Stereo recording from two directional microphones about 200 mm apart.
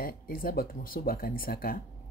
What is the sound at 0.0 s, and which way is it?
Speech, 45° left (ahead or behind).